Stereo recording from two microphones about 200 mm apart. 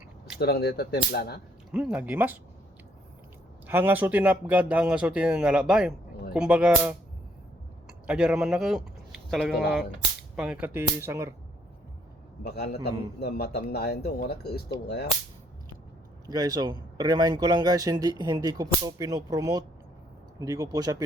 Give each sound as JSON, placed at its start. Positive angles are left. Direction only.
{"t": 0.3, "sound": "a man's voice", "side_deg": 50}
{"t": 1.7, "sound": "speech", "side_deg": -5}
{"t": 3.7, "sound": "speech", "side_deg": -10}
{"t": 12.4, "sound": "a man's voice", "side_deg": 50}
{"t": 16.2, "sound": "speech", "side_deg": -20}